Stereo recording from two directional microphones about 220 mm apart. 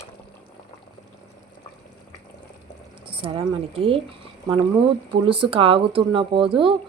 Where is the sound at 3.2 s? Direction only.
25° right (ahead or behind).